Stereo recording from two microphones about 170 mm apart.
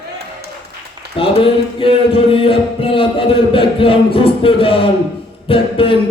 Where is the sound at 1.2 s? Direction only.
30° left (ahead or behind).